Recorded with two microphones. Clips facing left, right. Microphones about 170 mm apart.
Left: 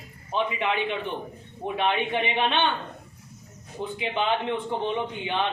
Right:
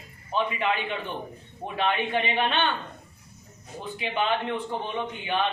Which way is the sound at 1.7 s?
20° left (ahead or behind).